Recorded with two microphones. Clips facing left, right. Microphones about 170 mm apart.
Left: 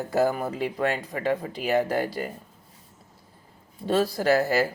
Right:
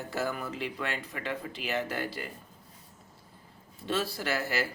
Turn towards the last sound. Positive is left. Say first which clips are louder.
# left 10 dB
turn(degrees=40)  # may be behind; listen again after turning